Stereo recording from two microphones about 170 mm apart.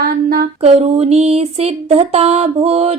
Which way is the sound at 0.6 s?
40° right (ahead or behind).